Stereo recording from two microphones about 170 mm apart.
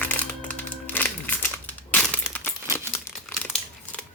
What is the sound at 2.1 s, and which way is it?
Coin, 10° left (ahead or behind).